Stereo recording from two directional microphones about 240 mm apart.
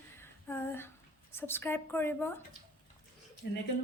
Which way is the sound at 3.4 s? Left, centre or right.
Left.